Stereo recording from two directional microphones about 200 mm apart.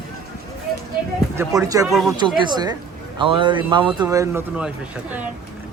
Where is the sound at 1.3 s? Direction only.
15° right (ahead or behind).